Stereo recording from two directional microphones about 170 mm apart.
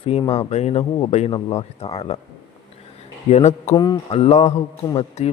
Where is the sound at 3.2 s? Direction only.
40° left (ahead or behind).